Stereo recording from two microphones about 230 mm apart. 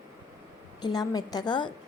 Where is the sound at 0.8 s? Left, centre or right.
Centre.